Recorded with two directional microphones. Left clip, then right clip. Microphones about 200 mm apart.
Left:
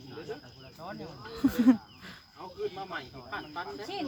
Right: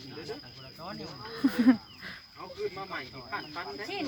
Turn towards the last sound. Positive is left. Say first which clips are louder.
# even
turn(degrees=-10)  # may be behind; listen again after turning